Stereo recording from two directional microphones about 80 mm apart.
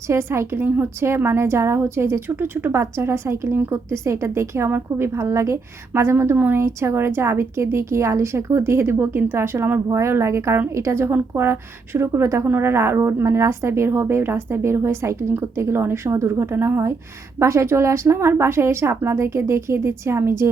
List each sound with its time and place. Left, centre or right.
0.1 s a woman's voice: right
12.5 s a woman's voice: right